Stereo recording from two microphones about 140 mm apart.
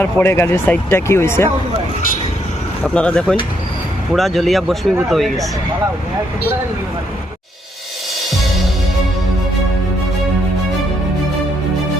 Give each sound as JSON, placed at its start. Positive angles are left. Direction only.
{"t": 0.0, "sound": "speech", "side_deg": 15}
{"t": 2.8, "sound": "speech", "side_deg": 10}